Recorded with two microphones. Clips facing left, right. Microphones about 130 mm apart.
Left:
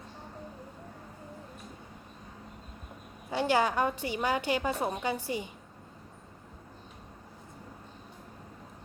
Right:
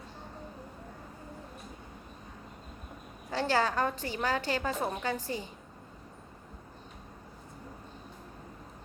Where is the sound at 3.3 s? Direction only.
15° left (ahead or behind).